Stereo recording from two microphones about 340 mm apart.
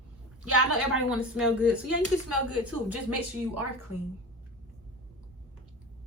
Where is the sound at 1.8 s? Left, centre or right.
Right.